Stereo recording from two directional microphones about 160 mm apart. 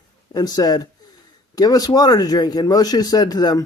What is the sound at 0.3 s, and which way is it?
Speech, 25° left (ahead or behind).